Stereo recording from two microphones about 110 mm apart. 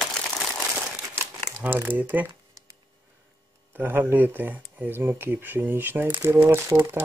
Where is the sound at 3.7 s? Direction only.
20° right (ahead or behind).